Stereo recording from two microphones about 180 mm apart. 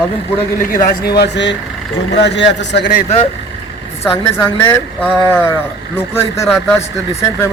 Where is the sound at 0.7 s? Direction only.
50° left (ahead or behind); by 2.9 s 75° left (ahead or behind).